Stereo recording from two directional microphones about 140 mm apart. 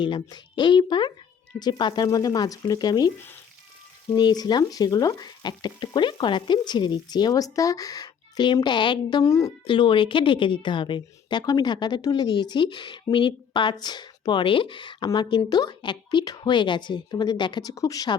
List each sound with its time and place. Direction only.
0.0 s a woman's voice: 30° left (ahead or behind)
4.1 s a woman's voice: 30° left (ahead or behind)
9.6 s a woman's voice: 35° left (ahead or behind)